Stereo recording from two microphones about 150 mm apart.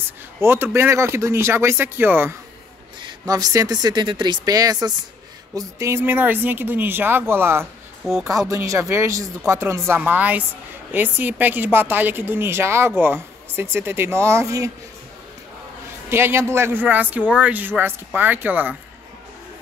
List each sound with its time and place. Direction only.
0.4 s speech: 15° right (ahead or behind)
3.0 s speech: 30° right (ahead or behind)
8.0 s speech: centre (ahead or behind)
8.5 s speech: 20° right (ahead or behind)
16.1 s speech: 15° right (ahead or behind)